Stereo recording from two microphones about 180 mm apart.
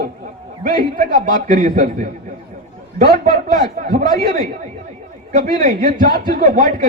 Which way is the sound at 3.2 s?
45° right (ahead or behind).